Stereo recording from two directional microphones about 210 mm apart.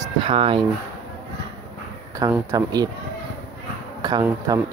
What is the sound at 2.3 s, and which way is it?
Speech, 15° right (ahead or behind).